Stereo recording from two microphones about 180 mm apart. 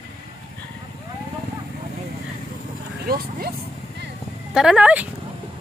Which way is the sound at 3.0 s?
55° right (ahead or behind).